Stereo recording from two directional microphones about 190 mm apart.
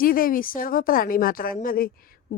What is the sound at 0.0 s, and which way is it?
A woman's voice, 50° left (ahead or behind).